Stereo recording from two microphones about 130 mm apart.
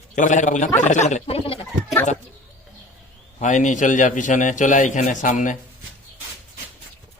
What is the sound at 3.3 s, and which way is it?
A man's voice, 70° left (ahead or behind).